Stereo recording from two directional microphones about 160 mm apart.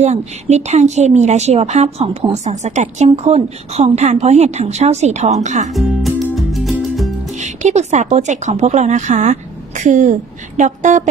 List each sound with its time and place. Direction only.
0.0 s a woman's voice: 45° right (ahead or behind)
5.7 s music: centre (ahead or behind)
7.3 s a woman's voice: 45° right (ahead or behind)